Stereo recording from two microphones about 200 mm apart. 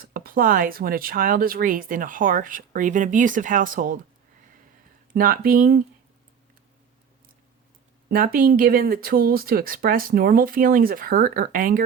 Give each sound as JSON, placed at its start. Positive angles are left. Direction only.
{"t": 0.0, "sound": "speech", "side_deg": -45}
{"t": 5.1, "sound": "speech", "side_deg": -45}
{"t": 8.1, "sound": "speech", "side_deg": -45}